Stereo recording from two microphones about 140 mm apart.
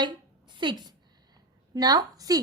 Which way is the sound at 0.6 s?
30° right (ahead or behind).